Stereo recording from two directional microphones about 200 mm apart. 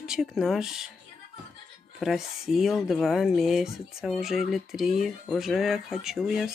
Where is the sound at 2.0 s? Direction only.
Centre (ahead or behind).